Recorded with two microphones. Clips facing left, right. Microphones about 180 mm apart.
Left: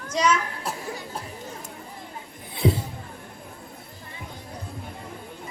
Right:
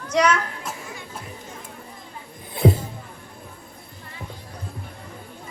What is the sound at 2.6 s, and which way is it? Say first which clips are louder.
Music: right 4 dB; 55° right (ahead or behind).